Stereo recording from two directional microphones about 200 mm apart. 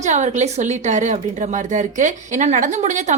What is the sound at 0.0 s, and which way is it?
A woman's voice, 35° right (ahead or behind).